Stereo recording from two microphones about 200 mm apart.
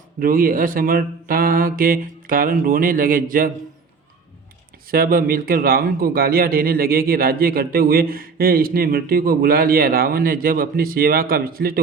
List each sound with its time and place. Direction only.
0.2 s a man's voice: 45° right (ahead or behind)
4.9 s a man's voice: 45° right (ahead or behind)